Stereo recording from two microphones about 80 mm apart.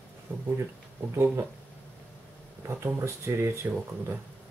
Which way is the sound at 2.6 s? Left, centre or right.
Right.